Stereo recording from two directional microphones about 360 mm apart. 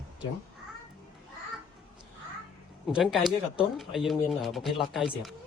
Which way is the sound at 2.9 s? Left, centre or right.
Centre.